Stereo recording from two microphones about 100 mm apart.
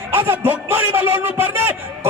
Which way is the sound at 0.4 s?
20° right (ahead or behind).